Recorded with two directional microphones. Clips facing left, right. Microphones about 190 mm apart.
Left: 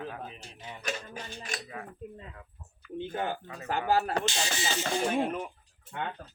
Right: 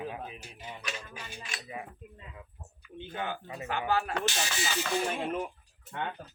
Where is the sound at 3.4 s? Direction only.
20° right (ahead or behind).